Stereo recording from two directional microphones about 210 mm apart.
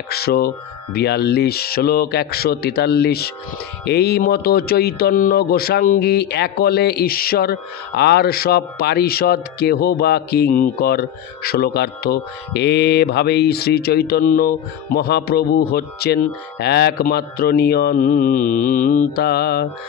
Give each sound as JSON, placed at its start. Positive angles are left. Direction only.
{"t": 0.1, "sound": "speech", "side_deg": 45}